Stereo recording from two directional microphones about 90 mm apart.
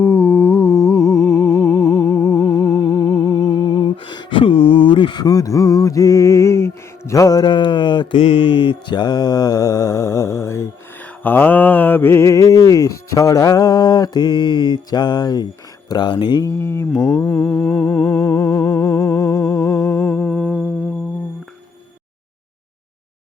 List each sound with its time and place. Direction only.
0.0 s music: 30° left (ahead or behind)
11.0 s mantra: 20° left (ahead or behind); by 15.4 s 50° left (ahead or behind)
15.9 s speech: 55° left (ahead or behind)
16.4 s mantra: 30° left (ahead or behind)
17.7 s humming: 25° left (ahead or behind)
18.2 s music: 45° left (ahead or behind)
20.1 s humming: 15° left (ahead or behind)